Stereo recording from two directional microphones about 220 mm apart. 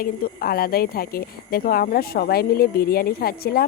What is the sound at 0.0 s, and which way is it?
Speech, 45° left (ahead or behind).